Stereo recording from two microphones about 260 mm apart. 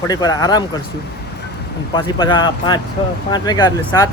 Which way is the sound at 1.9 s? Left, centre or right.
Centre.